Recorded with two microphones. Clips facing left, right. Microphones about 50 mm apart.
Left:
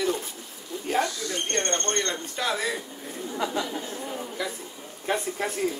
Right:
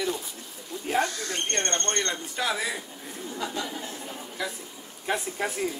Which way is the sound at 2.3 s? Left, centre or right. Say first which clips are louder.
Left 1 dB; centre.